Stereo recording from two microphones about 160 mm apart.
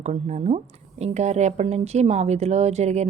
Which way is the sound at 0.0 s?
45° right (ahead or behind).